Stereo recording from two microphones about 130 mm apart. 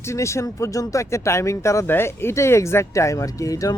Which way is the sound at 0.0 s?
20° left (ahead or behind).